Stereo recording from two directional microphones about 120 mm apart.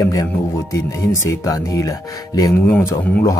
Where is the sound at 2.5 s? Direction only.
15° left (ahead or behind).